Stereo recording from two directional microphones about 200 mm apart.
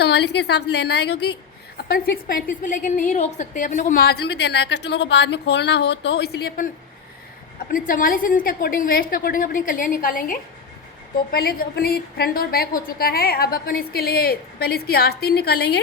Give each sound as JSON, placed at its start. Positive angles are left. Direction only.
{"t": 0.0, "sound": "a woman's voice", "side_deg": 55}
{"t": 7.7, "sound": "a woman's voice", "side_deg": 45}